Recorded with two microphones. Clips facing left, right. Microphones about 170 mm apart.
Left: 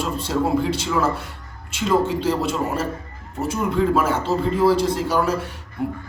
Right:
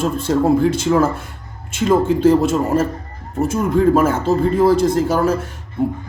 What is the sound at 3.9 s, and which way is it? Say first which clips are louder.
A man's voice: right 5 dB; 50° right (ahead or behind).